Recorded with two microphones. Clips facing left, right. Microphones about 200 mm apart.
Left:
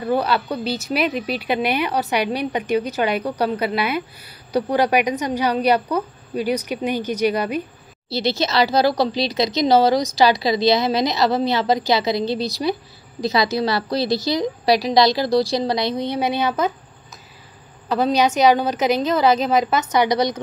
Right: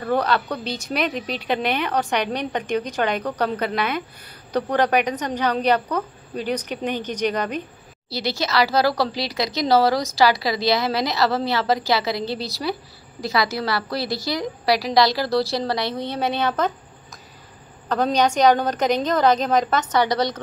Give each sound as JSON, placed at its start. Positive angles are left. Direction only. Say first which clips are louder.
{"t": 0.0, "sound": "speech", "louder": "left 1 dB", "side_deg": 5}
{"t": 8.1, "sound": "speech", "louder": "left 3 dB", "side_deg": 25}
{"t": 17.8, "sound": "speech", "louder": "left 2 dB", "side_deg": 5}